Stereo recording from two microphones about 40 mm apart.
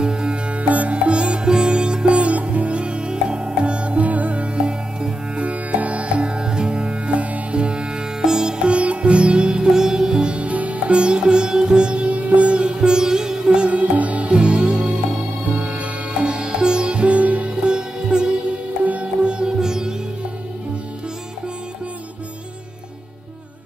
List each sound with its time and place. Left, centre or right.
0.0 s music: right
0.6 s sitar: right
4.6 s music: right
5.4 s music: right; by 10.3 s centre
10.3 s music: right
17.6 s sitar: right
19.2 s music: right